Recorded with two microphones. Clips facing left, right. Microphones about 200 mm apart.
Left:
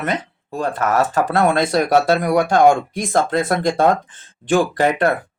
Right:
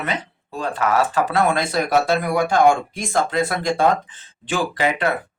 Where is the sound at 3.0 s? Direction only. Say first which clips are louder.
Left 2 dB; 55° left (ahead or behind).